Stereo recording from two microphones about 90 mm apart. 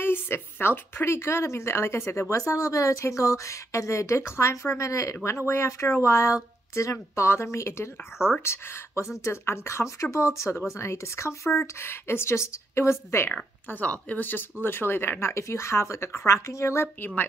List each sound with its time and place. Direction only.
0.0 s speech: 25° left (ahead or behind)
13.7 s speech: 15° left (ahead or behind)